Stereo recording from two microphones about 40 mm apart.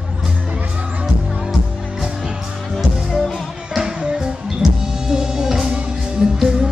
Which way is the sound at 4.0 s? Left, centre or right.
Centre.